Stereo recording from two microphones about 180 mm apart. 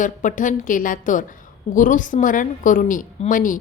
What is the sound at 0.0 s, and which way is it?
A woman's voice, 45° left (ahead or behind).